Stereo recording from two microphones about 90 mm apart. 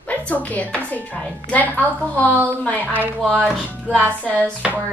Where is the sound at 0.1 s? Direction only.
15° left (ahead or behind).